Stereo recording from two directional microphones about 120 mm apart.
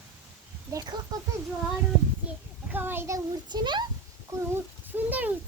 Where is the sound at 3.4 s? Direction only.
40° right (ahead or behind).